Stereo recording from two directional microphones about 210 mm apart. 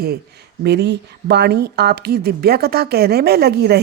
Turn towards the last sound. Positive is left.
turn(degrees=-50)  # may be behind; listen again after turning